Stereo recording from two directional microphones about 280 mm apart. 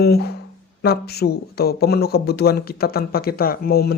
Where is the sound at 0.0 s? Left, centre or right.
Left.